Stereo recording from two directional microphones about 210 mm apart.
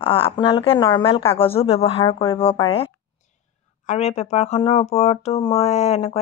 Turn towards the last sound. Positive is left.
turn(degrees=30)  # may be behind; listen again after turning